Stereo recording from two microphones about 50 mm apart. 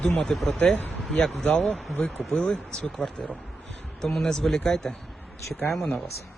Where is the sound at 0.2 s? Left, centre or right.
Centre.